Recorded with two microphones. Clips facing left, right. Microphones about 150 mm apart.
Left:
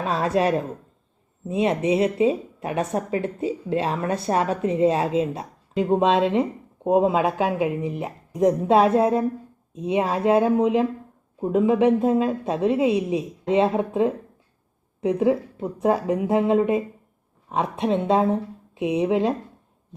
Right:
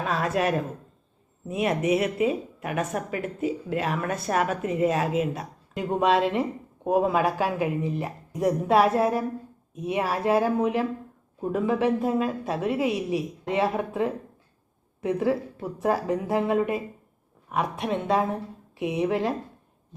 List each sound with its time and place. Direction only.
0.0 s a woman's voice: 30° left (ahead or behind)